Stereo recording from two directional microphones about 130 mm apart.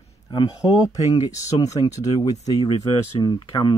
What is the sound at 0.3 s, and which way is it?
Speech, 35° left (ahead or behind).